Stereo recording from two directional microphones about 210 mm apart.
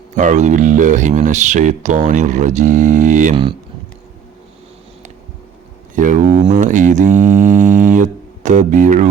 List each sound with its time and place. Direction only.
0.2 s speech: 35° right (ahead or behind)
6.0 s speech: 35° right (ahead or behind)